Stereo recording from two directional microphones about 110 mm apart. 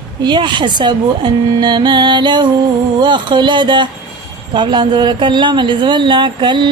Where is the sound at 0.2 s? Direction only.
45° right (ahead or behind).